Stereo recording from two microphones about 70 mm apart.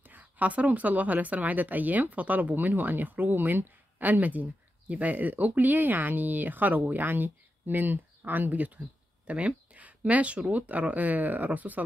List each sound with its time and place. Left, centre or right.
0.0 s speech: right